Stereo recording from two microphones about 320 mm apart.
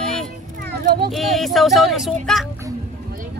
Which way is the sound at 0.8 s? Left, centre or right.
Right.